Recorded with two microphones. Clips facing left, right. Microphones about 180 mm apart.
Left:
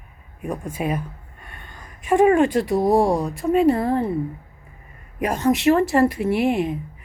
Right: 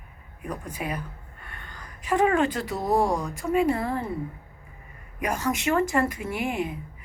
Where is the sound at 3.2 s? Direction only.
30° left (ahead or behind).